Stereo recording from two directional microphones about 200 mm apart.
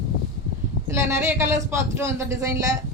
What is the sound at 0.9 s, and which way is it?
Speech, 15° right (ahead or behind).